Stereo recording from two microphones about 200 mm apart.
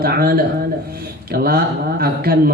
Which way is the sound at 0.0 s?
50° right (ahead or behind).